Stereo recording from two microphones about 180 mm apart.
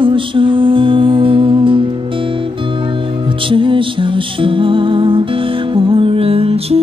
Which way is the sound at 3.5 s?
30° right (ahead or behind).